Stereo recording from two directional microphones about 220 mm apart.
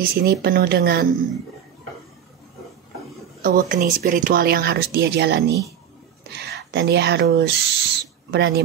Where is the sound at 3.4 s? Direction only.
40° right (ahead or behind).